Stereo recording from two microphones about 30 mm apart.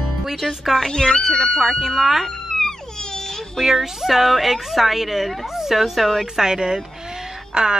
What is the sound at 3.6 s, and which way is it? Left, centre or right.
A woman's voice, centre.